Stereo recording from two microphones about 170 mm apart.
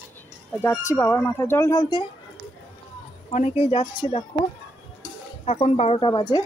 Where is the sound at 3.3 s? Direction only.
40° left (ahead or behind).